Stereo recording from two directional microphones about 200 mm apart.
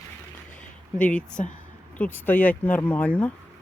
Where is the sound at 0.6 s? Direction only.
5° left (ahead or behind).